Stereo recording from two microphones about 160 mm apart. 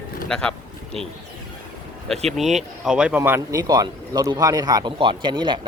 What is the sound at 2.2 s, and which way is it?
Speech, centre (ahead or behind).